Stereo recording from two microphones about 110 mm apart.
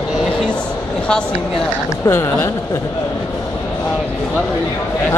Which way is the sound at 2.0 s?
25° left (ahead or behind).